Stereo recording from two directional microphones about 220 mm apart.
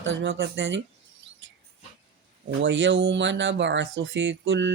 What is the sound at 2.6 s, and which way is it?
Speech, 55° right (ahead or behind).